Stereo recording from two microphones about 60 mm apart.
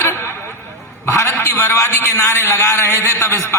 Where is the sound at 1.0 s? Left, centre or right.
Left.